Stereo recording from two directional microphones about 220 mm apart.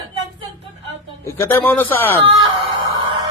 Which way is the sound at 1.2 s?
10° left (ahead or behind).